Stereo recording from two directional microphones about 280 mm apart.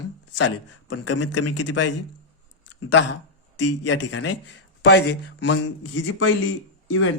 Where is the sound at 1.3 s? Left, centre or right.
Left.